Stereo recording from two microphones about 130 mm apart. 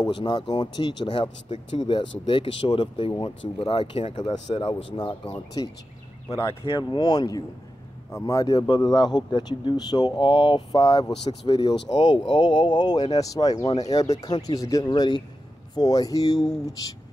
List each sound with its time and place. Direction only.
0.0 s speech: 35° left (ahead or behind)
6.2 s speech: 25° left (ahead or behind)
6.6 s speech: 40° left (ahead or behind)